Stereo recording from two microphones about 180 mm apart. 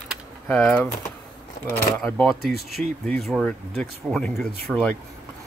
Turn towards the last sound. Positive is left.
turn(degrees=5)  # may be behind; listen again after turning